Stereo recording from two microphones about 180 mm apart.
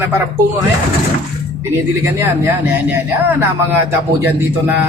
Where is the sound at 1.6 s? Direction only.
15° right (ahead or behind).